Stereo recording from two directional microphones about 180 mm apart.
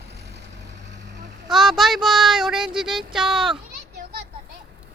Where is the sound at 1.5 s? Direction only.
Centre (ahead or behind).